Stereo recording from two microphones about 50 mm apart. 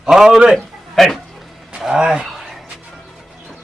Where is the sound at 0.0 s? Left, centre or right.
Centre.